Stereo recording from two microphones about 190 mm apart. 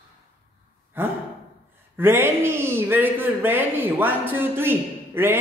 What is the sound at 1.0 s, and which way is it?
Sigh, 10° right (ahead or behind).